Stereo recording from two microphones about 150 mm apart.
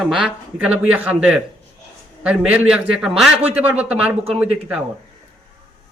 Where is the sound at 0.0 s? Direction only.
5° right (ahead or behind).